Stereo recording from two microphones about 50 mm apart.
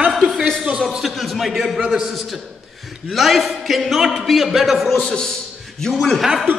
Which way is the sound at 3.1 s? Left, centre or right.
Centre.